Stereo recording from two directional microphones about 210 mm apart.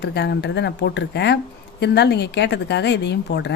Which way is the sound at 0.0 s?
50° left (ahead or behind).